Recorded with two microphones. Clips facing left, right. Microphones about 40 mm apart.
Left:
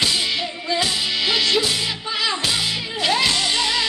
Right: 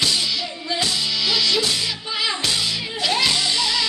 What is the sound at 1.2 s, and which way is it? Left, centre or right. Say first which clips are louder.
Music: left 2 dB; left.